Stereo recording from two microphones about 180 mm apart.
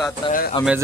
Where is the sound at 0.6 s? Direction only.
20° left (ahead or behind).